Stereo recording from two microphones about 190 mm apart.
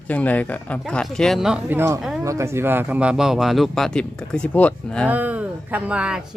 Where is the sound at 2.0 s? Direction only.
Centre (ahead or behind).